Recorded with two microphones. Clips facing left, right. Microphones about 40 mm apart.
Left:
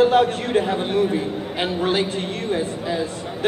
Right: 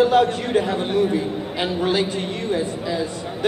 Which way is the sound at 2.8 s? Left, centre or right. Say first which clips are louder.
Even; centre.